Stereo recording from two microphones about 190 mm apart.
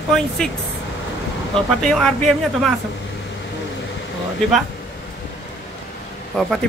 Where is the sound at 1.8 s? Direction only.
Centre (ahead or behind).